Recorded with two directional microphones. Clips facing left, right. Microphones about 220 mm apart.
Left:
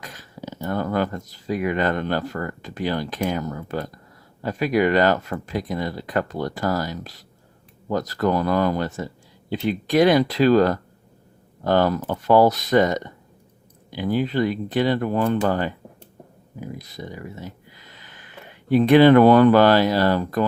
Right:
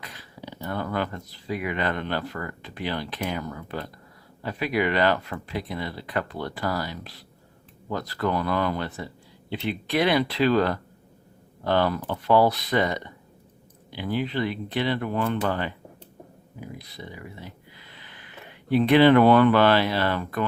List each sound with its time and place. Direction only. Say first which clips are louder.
0.0 s speech: left 5 dB; 45° left (ahead or behind)
16.6 s a sound: left 5 dB; 45° left (ahead or behind)
18.7 s speech: left 4 dB; 45° left (ahead or behind)